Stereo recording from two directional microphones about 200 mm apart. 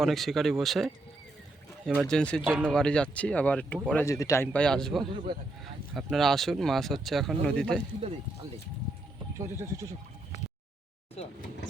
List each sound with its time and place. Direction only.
0.0 s speech: centre (ahead or behind)
1.9 s speech: 5° left (ahead or behind)
2.4 s speech: 10° right (ahead or behind)
2.6 s speech: 5° left (ahead or behind)
9.4 s speech: 15° right (ahead or behind)
11.2 s speech: 30° left (ahead or behind)